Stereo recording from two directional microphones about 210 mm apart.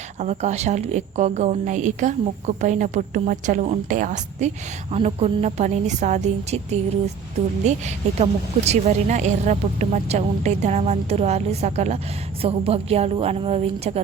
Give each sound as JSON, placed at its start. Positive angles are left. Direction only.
{"t": 0.2, "sound": "a woman's voice", "side_deg": -35}